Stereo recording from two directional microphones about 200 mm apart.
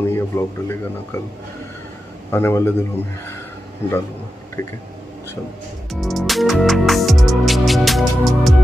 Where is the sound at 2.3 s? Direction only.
10° left (ahead or behind).